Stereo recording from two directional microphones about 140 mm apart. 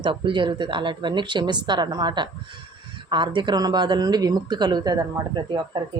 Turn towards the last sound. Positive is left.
turn(degrees=-30)  # may be behind; listen again after turning